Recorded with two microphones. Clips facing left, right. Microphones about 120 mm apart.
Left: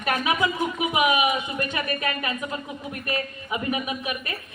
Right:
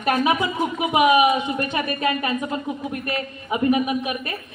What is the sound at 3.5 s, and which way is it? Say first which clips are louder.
Speech: right 9 dB; 30° right (ahead or behind).